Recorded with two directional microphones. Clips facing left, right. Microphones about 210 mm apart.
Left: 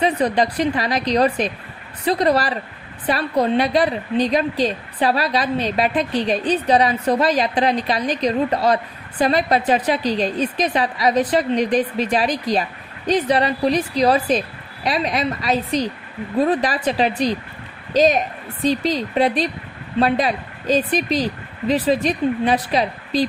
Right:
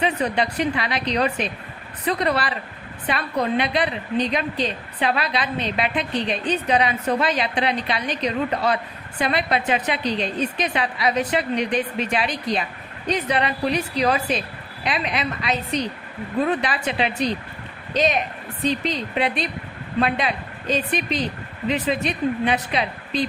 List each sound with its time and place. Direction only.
0.0 s a woman's voice: 35° left (ahead or behind)